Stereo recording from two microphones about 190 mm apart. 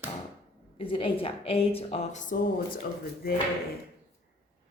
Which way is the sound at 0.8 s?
30° left (ahead or behind).